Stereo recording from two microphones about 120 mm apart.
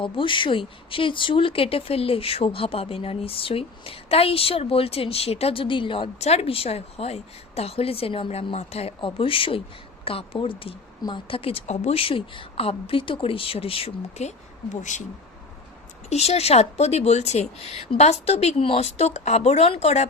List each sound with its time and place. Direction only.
0.0 s speech: 45° left (ahead or behind); by 15.0 s 90° left
16.0 s speech: 65° left (ahead or behind)